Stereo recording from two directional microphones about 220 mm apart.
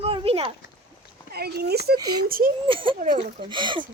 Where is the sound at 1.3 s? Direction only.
45° right (ahead or behind).